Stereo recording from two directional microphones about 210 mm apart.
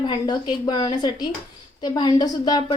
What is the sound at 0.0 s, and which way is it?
A woman's voice, 20° left (ahead or behind).